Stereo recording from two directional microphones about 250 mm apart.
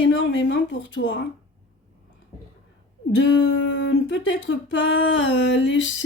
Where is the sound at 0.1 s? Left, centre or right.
Left.